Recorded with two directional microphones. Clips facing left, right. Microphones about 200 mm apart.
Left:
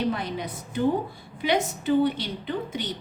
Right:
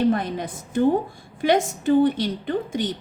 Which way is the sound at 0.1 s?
50° right (ahead or behind).